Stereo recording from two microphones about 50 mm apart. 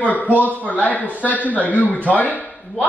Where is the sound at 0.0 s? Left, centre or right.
Left.